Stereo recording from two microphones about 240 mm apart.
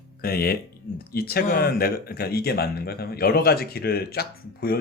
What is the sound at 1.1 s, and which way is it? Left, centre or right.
A woman's voice, left.